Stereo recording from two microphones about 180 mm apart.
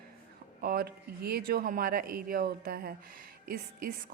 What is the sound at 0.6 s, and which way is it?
A woman's voice, 55° right (ahead or behind).